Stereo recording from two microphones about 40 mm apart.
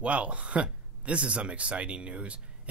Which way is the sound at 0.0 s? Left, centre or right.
Right.